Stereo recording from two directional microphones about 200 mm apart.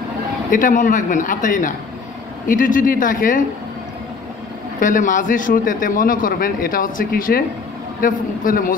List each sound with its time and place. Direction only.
0.5 s a man's voice: 40° left (ahead or behind)
4.7 s a man's voice: 40° left (ahead or behind)